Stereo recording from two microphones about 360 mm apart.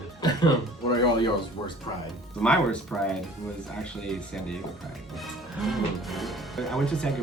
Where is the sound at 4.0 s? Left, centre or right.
Centre.